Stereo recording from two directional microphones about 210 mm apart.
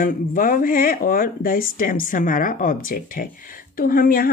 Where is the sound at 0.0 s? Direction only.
40° left (ahead or behind).